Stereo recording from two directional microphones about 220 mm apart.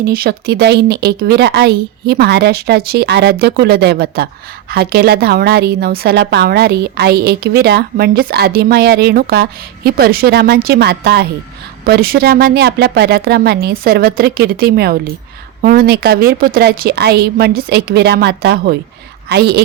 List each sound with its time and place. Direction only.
0.0 s a woman's voice: 45° right (ahead or behind)